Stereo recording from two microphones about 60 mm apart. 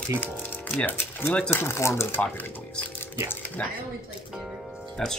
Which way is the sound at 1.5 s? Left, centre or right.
Left.